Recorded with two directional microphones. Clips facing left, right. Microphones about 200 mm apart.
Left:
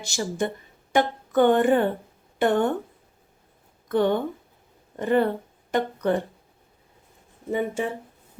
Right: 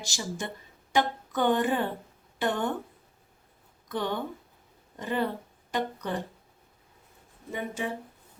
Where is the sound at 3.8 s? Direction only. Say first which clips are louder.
Left 9 dB; 55° left (ahead or behind).